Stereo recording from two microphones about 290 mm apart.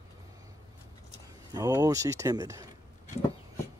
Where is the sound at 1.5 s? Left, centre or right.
Centre.